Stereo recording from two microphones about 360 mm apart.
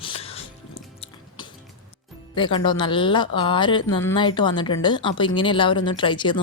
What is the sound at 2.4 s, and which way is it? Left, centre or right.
A woman's voice, centre.